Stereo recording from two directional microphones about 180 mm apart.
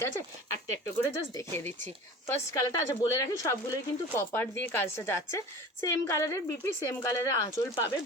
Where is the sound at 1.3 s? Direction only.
15° left (ahead or behind).